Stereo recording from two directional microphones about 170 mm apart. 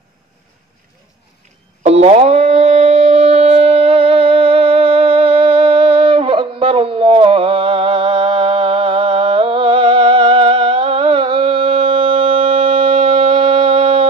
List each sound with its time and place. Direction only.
1.8 s shofar: 40° right (ahead or behind)